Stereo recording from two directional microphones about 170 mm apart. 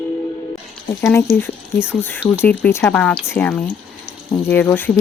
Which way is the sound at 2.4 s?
10° left (ahead or behind).